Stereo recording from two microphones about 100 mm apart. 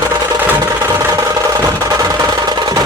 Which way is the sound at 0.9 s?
30° right (ahead or behind).